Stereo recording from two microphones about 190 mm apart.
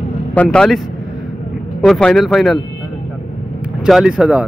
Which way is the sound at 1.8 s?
5° left (ahead or behind).